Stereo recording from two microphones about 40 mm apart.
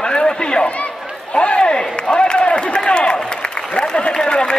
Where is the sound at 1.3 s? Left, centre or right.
Left.